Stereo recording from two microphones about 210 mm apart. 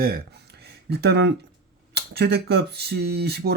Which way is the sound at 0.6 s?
50° right (ahead or behind).